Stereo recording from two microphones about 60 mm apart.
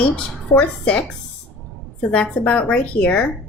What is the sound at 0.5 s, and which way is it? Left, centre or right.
A woman's voice, left.